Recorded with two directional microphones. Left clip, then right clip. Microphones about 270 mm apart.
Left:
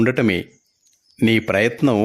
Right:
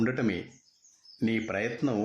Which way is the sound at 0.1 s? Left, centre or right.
Left.